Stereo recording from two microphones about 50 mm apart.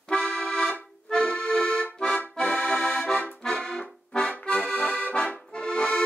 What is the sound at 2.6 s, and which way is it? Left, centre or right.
Accordion, centre.